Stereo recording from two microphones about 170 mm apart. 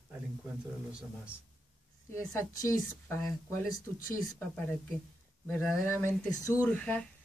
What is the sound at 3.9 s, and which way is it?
Speech, 55° left (ahead or behind).